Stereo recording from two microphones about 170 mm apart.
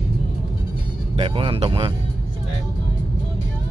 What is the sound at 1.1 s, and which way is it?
Speech, 30° right (ahead or behind).